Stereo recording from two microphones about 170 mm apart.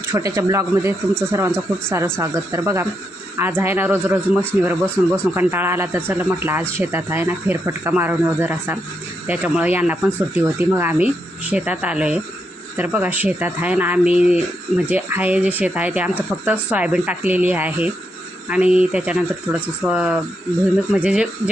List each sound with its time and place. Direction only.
0.1 s speech: 20° right (ahead or behind)